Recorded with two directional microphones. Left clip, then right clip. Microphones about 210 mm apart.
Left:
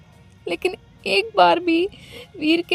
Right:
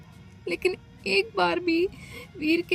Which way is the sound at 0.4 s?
45° left (ahead or behind).